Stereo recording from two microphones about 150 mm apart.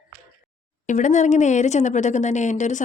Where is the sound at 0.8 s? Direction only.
55° left (ahead or behind).